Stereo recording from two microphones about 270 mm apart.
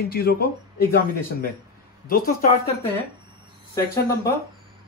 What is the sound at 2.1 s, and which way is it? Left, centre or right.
Speech, left.